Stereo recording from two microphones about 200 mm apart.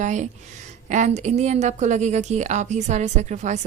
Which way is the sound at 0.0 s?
35° right (ahead or behind).